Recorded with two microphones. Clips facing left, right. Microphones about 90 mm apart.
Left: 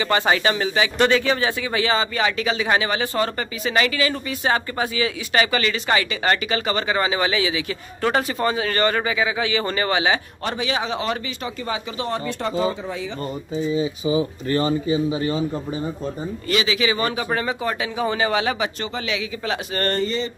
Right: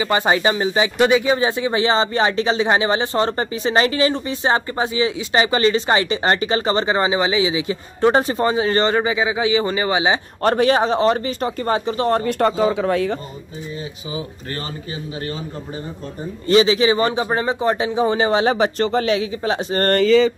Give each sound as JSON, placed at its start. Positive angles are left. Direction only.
{"t": 0.0, "sound": "speech", "side_deg": -20}
{"t": 10.4, "sound": "speech", "side_deg": -50}
{"t": 16.4, "sound": "speech", "side_deg": -30}